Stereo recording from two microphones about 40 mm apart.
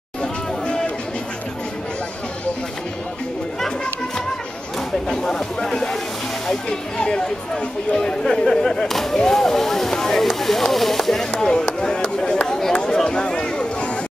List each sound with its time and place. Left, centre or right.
5.0 s speech: centre
7.0 s speech: left
11.8 s a sound: centre